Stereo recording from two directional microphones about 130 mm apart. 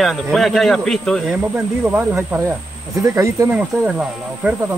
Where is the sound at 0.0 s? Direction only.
Centre (ahead or behind).